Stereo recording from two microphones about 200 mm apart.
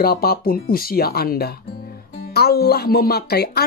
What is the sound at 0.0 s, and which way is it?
Speech, 50° left (ahead or behind).